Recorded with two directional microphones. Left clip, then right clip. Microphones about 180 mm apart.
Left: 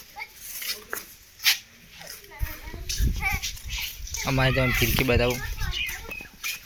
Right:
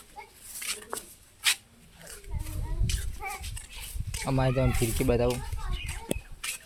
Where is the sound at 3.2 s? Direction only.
45° right (ahead or behind).